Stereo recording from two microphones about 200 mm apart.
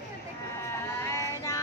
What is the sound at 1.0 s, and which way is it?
Music, 15° left (ahead or behind).